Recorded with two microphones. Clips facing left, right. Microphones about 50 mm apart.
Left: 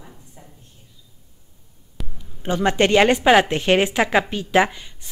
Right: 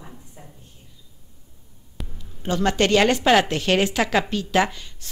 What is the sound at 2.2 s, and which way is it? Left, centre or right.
Speech, centre.